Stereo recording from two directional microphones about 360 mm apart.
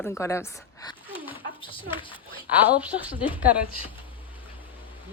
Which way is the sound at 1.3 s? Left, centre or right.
Centre.